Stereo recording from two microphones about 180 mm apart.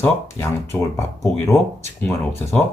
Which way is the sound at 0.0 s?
15° left (ahead or behind).